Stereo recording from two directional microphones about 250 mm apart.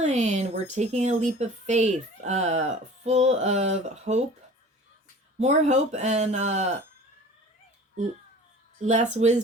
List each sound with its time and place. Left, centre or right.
0.0 s a woman's voice: right
5.4 s a woman's voice: right
8.8 s a woman's voice: right